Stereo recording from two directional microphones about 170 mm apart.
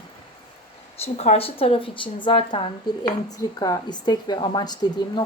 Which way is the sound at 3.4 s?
20° left (ahead or behind).